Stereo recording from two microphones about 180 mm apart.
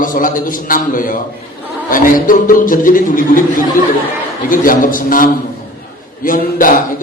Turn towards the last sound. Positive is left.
turn(degrees=50)  # may be behind; listen again after turning